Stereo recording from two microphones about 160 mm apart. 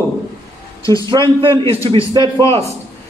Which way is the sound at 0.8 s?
20° left (ahead or behind).